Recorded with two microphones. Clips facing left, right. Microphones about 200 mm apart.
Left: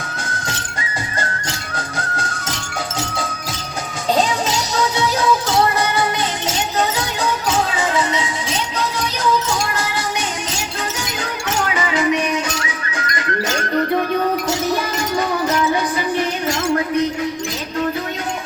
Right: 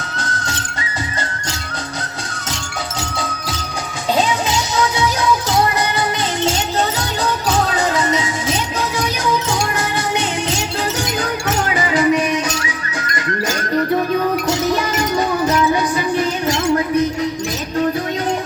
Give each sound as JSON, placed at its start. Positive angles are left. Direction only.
{"t": 7.8, "sound": "music", "side_deg": -40}
{"t": 11.2, "sound": "music", "side_deg": -35}